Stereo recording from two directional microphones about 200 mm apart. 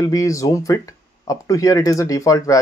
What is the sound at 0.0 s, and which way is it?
Speech, 15° left (ahead or behind).